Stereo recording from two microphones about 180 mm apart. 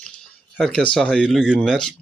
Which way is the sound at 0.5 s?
5° left (ahead or behind).